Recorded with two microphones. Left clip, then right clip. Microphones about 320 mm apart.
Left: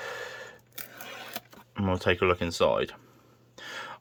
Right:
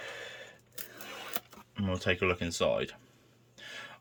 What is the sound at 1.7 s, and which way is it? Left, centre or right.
Speech, centre.